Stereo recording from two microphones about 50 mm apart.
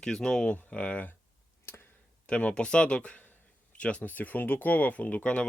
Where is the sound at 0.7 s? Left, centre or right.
Left.